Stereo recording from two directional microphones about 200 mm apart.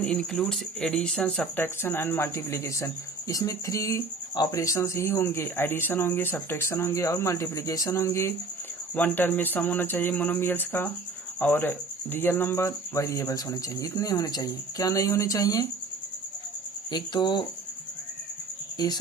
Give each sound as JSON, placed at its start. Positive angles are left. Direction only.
{"t": 0.0, "sound": "speech", "side_deg": 5}
{"t": 16.9, "sound": "speech", "side_deg": 20}
{"t": 18.8, "sound": "speech", "side_deg": 20}